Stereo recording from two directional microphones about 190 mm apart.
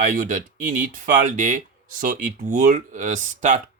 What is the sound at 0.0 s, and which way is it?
Speech, 40° right (ahead or behind).